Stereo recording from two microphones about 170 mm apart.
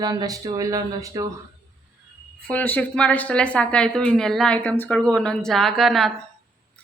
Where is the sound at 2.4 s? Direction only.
10° left (ahead or behind).